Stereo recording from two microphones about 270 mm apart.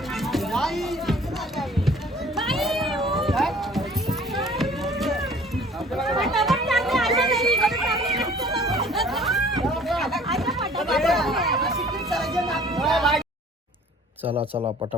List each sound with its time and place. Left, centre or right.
0.1 s music: centre
1.5 s run: centre
6.0 s chatter: centre
12.7 s speech: centre
14.3 s a man's voice: centre